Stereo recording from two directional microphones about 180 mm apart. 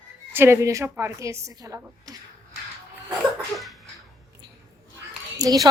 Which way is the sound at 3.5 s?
Centre (ahead or behind).